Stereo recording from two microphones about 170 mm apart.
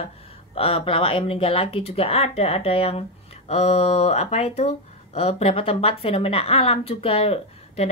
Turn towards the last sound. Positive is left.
turn(degrees=35)  # may be behind; listen again after turning